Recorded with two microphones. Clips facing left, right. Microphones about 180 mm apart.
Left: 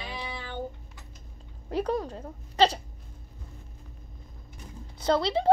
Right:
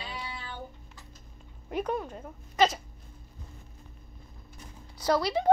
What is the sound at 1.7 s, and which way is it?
A child's voice, 35° left (ahead or behind).